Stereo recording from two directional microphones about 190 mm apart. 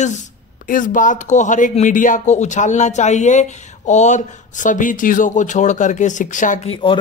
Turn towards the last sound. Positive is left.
turn(degrees=25)  # may be behind; listen again after turning